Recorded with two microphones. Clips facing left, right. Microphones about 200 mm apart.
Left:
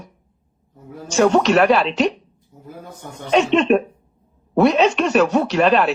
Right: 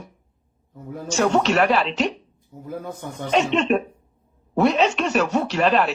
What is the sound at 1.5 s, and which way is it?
Speech, 65° left (ahead or behind).